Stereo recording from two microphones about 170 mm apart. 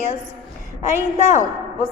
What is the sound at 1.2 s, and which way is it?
Speech, 45° left (ahead or behind).